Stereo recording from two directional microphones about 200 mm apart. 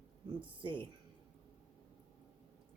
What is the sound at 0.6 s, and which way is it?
Speech, 25° right (ahead or behind).